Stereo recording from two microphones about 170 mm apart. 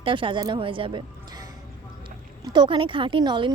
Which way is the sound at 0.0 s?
30° right (ahead or behind).